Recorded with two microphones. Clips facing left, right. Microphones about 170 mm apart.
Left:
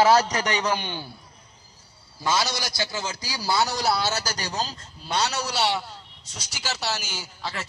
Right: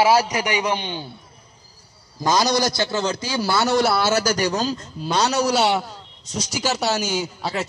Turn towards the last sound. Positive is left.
turn(degrees=-40)  # may be behind; listen again after turning